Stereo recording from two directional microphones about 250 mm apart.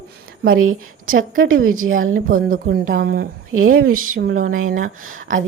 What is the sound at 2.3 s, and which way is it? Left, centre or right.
Speech, right.